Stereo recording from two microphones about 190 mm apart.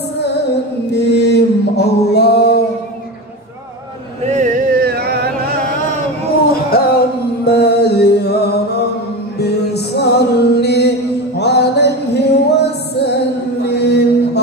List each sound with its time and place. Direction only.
0.9 s mantra: 60° left (ahead or behind)
4.3 s music: 45° right (ahead or behind)
6.7 s music: 50° left (ahead or behind)
13.6 s mantra: 60° left (ahead or behind)